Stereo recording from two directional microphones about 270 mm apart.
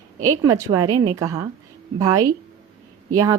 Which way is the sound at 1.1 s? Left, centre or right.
Centre.